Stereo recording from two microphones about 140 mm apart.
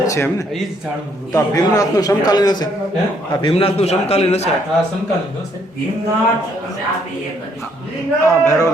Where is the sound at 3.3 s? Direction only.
40° left (ahead or behind).